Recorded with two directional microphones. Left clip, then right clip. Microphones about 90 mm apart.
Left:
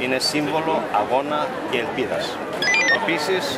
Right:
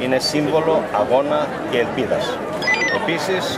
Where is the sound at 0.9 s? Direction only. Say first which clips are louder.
Right 3 dB; 5° left (ahead or behind).